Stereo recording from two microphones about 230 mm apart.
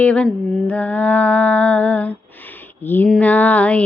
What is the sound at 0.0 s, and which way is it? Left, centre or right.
Female singing, centre.